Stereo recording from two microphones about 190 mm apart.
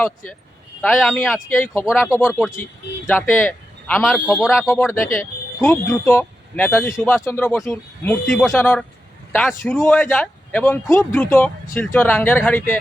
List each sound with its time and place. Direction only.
0.8 s speech: centre (ahead or behind)
1.5 s speech: 10° left (ahead or behind)
1.8 s speech: 5° right (ahead or behind)
3.1 s speech: 10° left (ahead or behind)
4.6 s speech: 10° left (ahead or behind)